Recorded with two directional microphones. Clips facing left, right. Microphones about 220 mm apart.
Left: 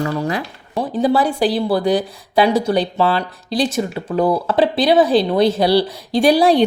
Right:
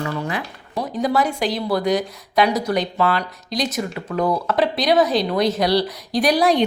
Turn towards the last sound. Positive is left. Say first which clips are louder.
# left 4 dB
turn(degrees=30)  # may be behind; listen again after turning